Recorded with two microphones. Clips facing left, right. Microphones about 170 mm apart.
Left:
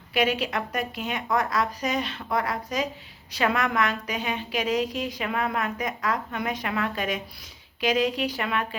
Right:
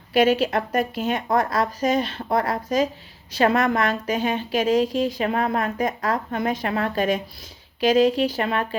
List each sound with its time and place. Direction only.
0.1 s a woman's voice: 45° right (ahead or behind)
4.6 s a woman's voice: 30° right (ahead or behind)